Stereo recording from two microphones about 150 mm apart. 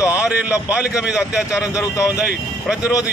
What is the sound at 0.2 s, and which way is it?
A man's voice, 10° right (ahead or behind).